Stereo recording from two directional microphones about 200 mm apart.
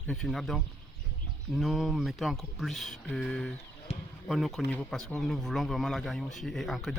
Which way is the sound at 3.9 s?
30° left (ahead or behind).